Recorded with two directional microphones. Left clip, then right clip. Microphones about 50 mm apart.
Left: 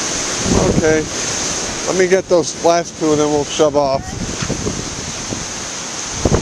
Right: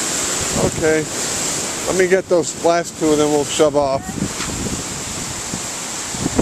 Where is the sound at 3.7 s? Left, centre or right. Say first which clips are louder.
Left 2 dB; centre.